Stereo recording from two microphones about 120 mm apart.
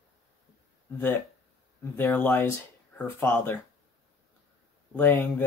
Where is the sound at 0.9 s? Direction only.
20° left (ahead or behind).